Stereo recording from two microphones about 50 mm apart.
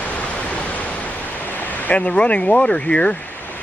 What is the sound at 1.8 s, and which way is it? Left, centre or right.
Speech, left.